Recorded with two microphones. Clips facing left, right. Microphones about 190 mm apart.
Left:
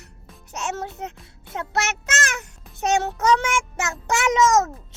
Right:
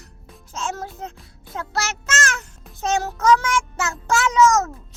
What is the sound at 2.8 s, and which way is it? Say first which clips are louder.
Child singing: left 1 dB; 20° left (ahead or behind).